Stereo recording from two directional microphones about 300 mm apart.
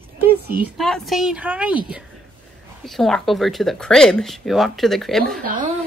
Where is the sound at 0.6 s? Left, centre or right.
Centre.